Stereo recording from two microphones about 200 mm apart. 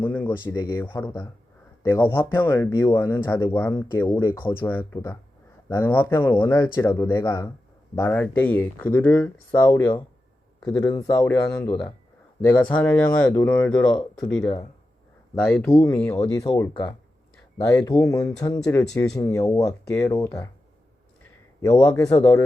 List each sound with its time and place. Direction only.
0.0 s speech: 10° left (ahead or behind)
21.6 s speech: 15° left (ahead or behind)